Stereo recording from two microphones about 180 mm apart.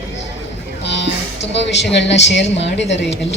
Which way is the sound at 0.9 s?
75° left (ahead or behind).